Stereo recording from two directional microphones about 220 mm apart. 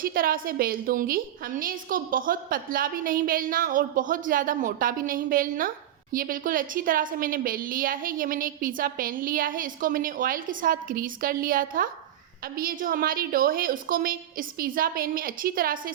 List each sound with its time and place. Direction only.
0.0 s a woman's voice: 40° right (ahead or behind)